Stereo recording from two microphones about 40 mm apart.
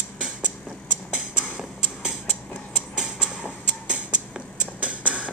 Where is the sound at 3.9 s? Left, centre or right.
Right.